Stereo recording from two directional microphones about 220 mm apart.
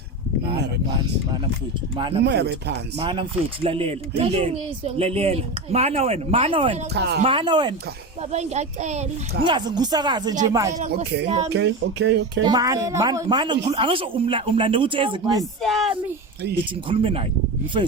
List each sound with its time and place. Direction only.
2.0 s speech: 25° right (ahead or behind)
2.2 s speech: 50° right (ahead or behind)
3.0 s speech: 25° right (ahead or behind)
6.9 s speech: 50° right (ahead or behind)
7.3 s a child's voice: 20° right (ahead or behind)
9.4 s speech: 20° right (ahead or behind)
10.8 s a child's voice: 35° right (ahead or behind)
11.5 s speech: 55° right (ahead or behind)
12.4 s speech: 20° right (ahead or behind)
15.6 s speech: centre (ahead or behind)
16.9 s speech: 25° right (ahead or behind)